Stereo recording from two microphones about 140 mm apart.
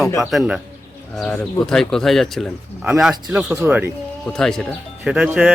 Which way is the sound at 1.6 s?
5° left (ahead or behind).